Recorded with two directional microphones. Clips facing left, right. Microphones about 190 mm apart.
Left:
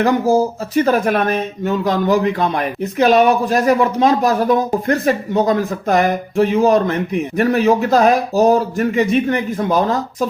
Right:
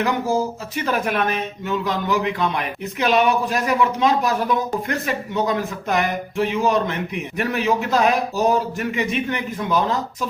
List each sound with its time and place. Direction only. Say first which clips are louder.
0.0 s speech: left 7 dB; 40° left (ahead or behind)